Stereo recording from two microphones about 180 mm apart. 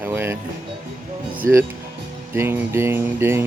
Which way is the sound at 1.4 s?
15° right (ahead or behind).